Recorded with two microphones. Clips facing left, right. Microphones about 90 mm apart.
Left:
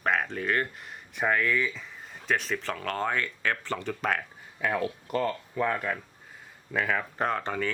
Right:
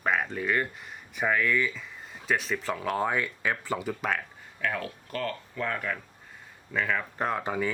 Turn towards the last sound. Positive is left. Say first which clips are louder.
# even
turn(degrees=-10)  # may be behind; listen again after turning